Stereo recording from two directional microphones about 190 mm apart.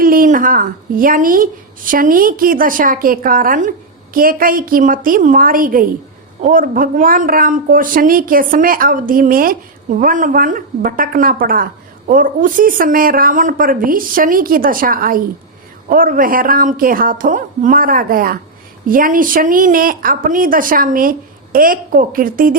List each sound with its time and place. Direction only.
0.0 s speech: 50° right (ahead or behind)